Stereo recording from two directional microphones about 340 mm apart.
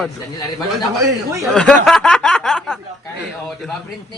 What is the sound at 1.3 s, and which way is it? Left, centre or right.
Speech, centre.